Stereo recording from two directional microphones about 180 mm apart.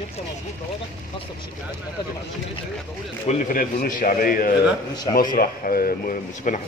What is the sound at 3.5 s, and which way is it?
Speech, 50° left (ahead or behind).